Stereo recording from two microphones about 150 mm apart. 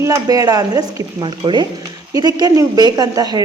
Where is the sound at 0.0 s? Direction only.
25° right (ahead or behind).